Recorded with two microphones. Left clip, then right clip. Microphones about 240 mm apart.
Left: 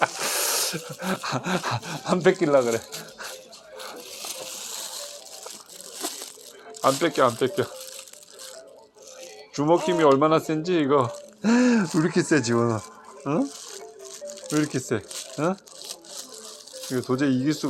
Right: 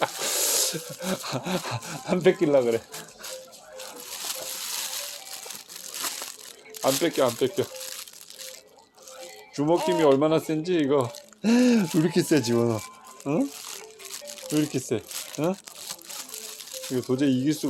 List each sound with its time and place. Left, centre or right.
0.0 s a sound: centre
6.8 s speech: centre
9.6 s speech: centre
11.4 s speech: centre
14.5 s speech: centre